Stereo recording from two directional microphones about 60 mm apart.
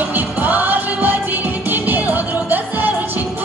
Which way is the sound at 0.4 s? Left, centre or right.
Right.